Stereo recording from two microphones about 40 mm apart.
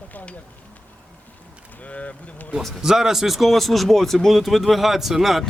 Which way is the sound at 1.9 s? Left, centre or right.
Left.